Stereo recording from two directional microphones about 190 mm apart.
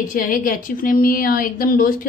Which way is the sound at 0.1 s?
45° left (ahead or behind).